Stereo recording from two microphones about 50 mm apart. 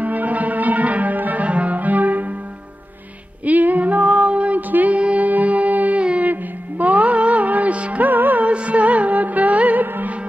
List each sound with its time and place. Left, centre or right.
0.0 s music: right
3.4 s female singing: right
6.0 s music: right
8.5 s music: right